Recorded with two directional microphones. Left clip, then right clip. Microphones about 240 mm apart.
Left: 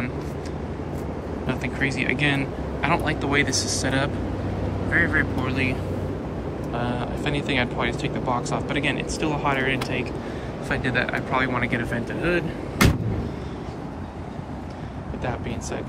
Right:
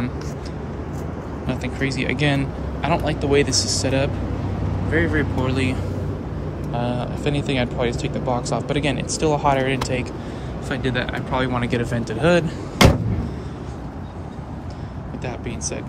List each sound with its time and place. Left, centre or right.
1.5 s speech: centre
5.5 s speech: centre
10.7 s speech: centre